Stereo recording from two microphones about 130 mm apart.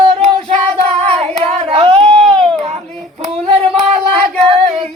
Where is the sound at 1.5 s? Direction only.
50° right (ahead or behind).